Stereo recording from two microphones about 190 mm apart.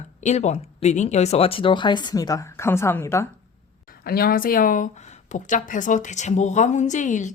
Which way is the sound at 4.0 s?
50° left (ahead or behind).